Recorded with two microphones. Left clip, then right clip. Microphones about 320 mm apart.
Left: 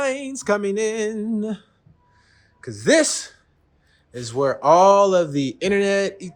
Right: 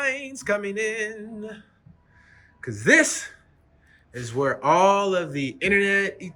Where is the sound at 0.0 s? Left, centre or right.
Centre.